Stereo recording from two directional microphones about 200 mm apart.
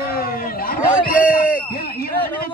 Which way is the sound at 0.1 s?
45° left (ahead or behind).